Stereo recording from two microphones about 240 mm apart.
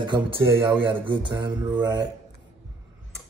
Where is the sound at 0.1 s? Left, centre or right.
Centre.